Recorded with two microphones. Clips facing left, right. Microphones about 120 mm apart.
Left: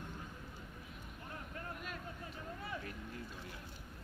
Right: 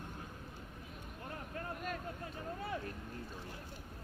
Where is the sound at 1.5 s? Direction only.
45° right (ahead or behind).